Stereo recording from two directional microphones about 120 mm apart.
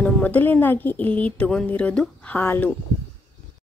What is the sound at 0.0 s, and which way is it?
Speech, 10° left (ahead or behind).